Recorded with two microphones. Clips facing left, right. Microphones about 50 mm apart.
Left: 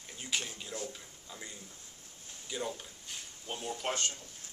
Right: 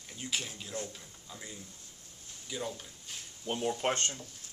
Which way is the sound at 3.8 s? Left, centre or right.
Right.